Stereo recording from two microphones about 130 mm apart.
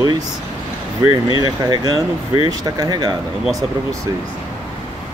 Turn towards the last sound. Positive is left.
turn(degrees=-30)  # may be behind; listen again after turning